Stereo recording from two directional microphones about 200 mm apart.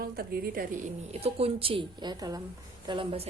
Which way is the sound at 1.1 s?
30° right (ahead or behind).